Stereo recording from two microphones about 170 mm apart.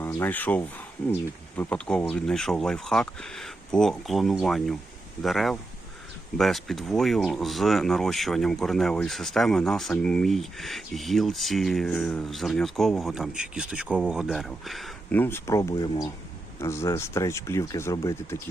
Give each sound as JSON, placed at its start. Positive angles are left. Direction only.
{"t": 0.0, "sound": "speech", "side_deg": 15}
{"t": 15.1, "sound": "speech", "side_deg": 10}